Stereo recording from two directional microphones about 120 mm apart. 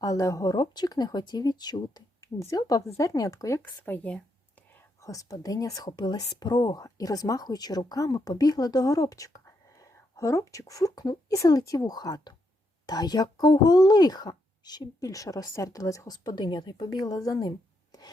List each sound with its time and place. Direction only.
0.0 s a woman's voice: 30° left (ahead or behind)
3.6 s speech: 15° left (ahead or behind)
5.0 s a woman's voice: 30° left (ahead or behind)
17.9 s rub: 30° left (ahead or behind)